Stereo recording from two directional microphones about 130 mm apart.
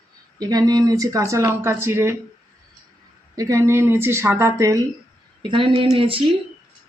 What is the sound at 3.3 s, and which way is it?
Speech, 25° right (ahead or behind).